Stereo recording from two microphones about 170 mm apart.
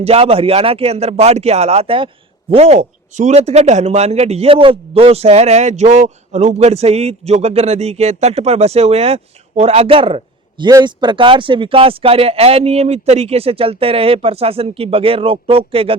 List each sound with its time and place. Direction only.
0.0 s speech: 35° right (ahead or behind)